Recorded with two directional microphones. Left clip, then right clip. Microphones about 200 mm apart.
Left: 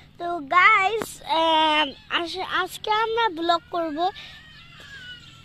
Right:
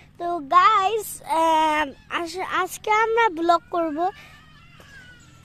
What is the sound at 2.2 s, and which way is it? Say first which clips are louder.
Speech: right 1 dB; 15° right (ahead or behind).